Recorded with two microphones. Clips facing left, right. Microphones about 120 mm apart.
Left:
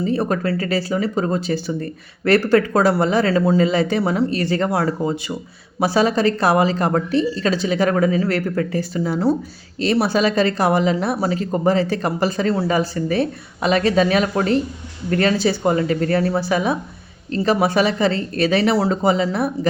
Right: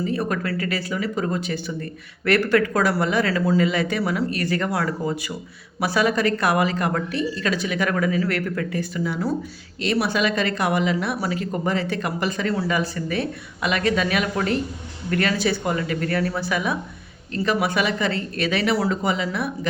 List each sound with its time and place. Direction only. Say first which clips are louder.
0.0 s speech: left 4 dB; 30° left (ahead or behind)